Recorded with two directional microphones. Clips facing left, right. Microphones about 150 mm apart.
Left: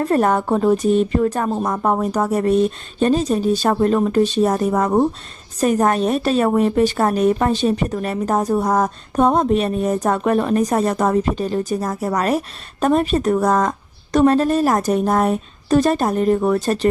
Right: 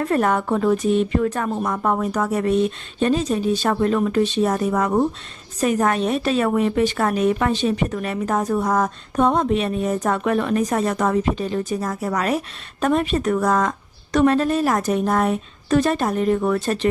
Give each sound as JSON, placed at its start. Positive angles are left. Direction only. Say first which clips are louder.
{"t": 0.0, "sound": "a woman's voice", "louder": "left 3 dB", "side_deg": 35}